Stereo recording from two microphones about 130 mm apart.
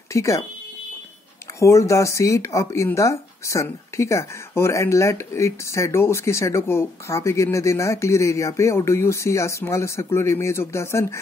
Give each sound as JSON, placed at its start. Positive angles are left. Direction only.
{"t": 0.1, "sound": "speech", "side_deg": 25}
{"t": 1.6, "sound": "speech", "side_deg": 20}